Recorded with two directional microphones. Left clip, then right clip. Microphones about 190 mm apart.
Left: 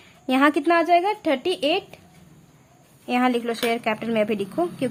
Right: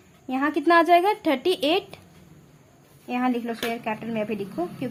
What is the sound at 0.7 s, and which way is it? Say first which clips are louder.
A woman's voice: right 1 dB; 5° left (ahead or behind).